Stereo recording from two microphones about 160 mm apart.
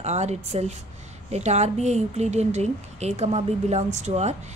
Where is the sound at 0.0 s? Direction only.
45° right (ahead or behind).